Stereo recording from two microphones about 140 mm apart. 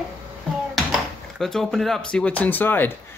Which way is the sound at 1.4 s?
Centre (ahead or behind).